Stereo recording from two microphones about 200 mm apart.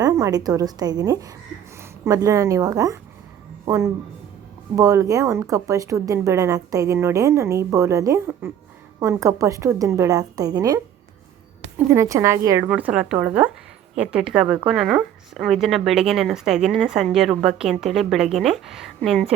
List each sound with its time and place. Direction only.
0.0 s a woman's voice: 20° right (ahead or behind)
11.9 s a woman's voice: 15° right (ahead or behind)